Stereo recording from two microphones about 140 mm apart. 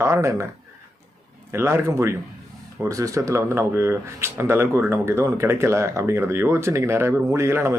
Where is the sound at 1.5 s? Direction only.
20° right (ahead or behind).